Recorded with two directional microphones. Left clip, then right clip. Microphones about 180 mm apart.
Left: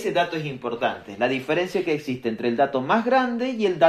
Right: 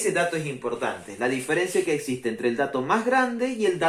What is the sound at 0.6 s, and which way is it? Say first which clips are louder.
Speech: left 3 dB; 35° left (ahead or behind).